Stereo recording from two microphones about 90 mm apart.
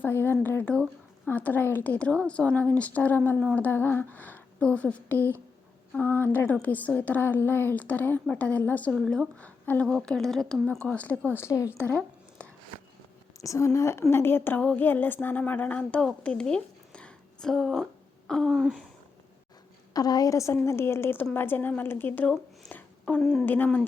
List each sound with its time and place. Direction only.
0.0 s a woman's voice: 25° left (ahead or behind)
9.8 s speech: 5° left (ahead or behind)
10.9 s a woman's voice: 15° left (ahead or behind)
11.3 s a woman's voice: 35° left (ahead or behind)
11.9 s a sound: 10° left (ahead or behind)
13.4 s a woman's voice: 35° left (ahead or behind); by 16.0 s 15° left (ahead or behind)
16.2 s a sound: 10° left (ahead or behind)
18.3 s speech: 5° left (ahead or behind)
19.9 s a woman's voice: 45° left (ahead or behind); by 22.3 s 20° left (ahead or behind)
22.3 s a sound: 15° left (ahead or behind)
23.4 s a woman's voice: 20° left (ahead or behind)